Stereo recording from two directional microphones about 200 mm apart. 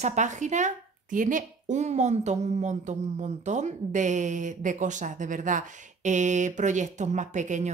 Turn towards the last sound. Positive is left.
turn(degrees=-35)  # may be behind; listen again after turning